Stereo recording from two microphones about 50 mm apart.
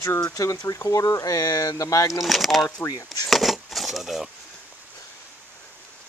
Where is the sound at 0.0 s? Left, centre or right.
Left.